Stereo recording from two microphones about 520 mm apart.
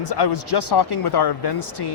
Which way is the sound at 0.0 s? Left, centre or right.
Left.